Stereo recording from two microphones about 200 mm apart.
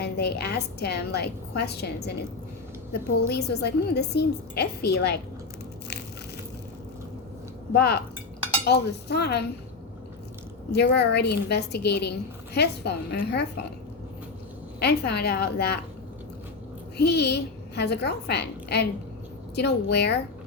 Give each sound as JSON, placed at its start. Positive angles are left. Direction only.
{"t": 0.0, "sound": "a woman's voice", "side_deg": 55}
{"t": 3.2, "sound": "a woman's voice", "side_deg": 55}
{"t": 7.7, "sound": "a woman's voice", "side_deg": 55}
{"t": 10.7, "sound": "a woman's voice", "side_deg": 55}
{"t": 14.8, "sound": "a woman's voice", "side_deg": 55}
{"t": 17.0, "sound": "a woman's voice", "side_deg": 55}